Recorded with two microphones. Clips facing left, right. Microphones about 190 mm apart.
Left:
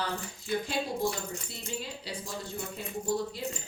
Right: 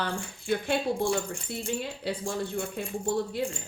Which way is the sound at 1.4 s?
60° right (ahead or behind).